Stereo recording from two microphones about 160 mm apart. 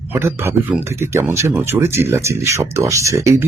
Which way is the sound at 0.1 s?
15° right (ahead or behind).